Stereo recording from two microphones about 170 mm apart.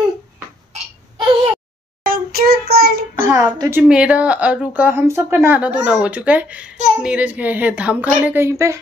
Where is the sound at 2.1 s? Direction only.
60° right (ahead or behind).